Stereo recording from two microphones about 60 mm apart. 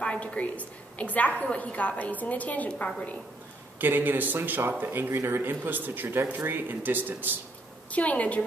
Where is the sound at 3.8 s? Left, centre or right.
Right.